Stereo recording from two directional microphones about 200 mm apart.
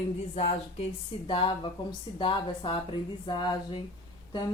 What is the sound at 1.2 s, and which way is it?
Speech, 25° left (ahead or behind).